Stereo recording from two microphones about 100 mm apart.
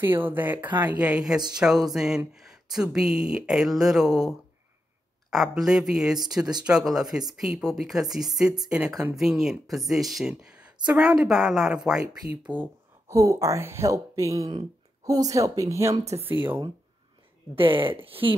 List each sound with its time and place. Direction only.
0.0 s speech: 20° right (ahead or behind)
1.1 s speech: 5° right (ahead or behind)
12.5 s speech: 50° right (ahead or behind)
13.1 s speech: 30° right (ahead or behind)
16.3 s speech: 20° right (ahead or behind)
17.6 s speech: 60° right (ahead or behind)